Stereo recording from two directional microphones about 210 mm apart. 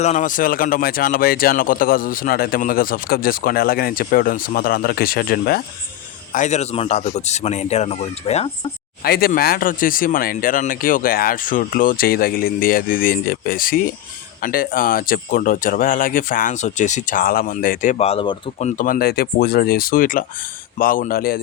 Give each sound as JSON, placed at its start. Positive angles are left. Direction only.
{"t": 0.0, "sound": "speech", "side_deg": 35}
{"t": 6.3, "sound": "speech", "side_deg": 35}
{"t": 9.0, "sound": "speech", "side_deg": 45}
{"t": 18.8, "sound": "speech", "side_deg": 45}